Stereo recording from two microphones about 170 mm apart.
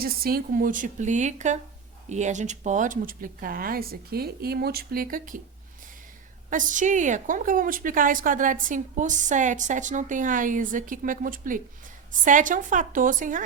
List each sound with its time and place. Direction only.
0.0 s a woman's voice: 60° right (ahead or behind)
6.5 s a woman's voice: 50° right (ahead or behind)